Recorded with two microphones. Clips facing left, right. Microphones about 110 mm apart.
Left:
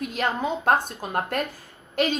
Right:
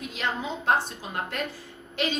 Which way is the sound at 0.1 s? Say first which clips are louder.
Left 4 dB; 50° left (ahead or behind).